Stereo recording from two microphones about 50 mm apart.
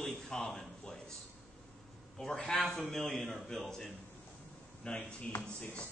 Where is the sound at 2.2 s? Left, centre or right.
Centre.